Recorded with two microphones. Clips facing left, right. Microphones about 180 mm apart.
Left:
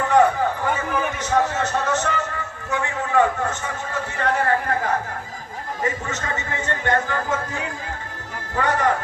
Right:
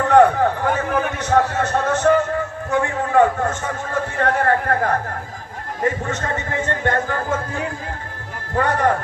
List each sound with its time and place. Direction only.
0.1 s a man's voice: 60° right (ahead or behind)
8.5 s a man's voice: 55° right (ahead or behind)